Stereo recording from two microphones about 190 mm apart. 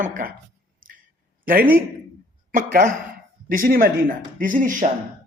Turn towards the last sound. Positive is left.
turn(degrees=-45)  # may be behind; listen again after turning